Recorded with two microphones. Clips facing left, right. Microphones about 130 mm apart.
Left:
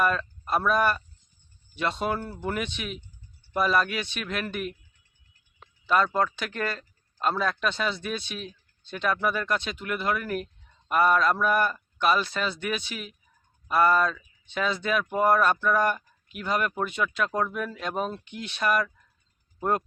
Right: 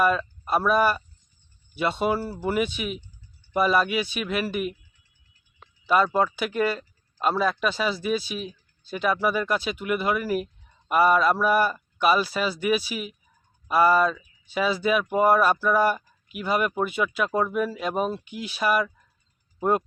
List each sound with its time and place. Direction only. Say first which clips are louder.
0.0 s speech: right 3 dB; 5° right (ahead or behind)
5.8 s speech: right 3 dB; 5° right (ahead or behind)